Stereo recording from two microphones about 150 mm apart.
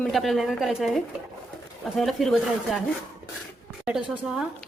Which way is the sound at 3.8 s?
5° right (ahead or behind).